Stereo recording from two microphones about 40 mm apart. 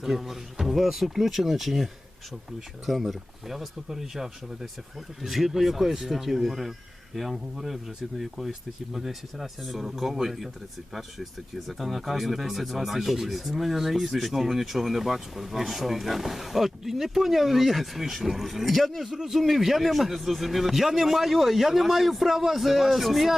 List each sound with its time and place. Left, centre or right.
0.0 s speech: centre